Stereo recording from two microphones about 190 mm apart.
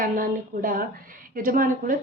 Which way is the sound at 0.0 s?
45° right (ahead or behind).